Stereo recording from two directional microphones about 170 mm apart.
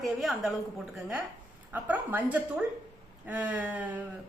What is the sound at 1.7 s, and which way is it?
A woman's voice, 10° right (ahead or behind).